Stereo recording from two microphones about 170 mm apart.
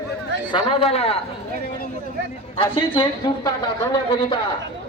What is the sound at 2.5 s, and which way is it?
A man's voice, 30° left (ahead or behind).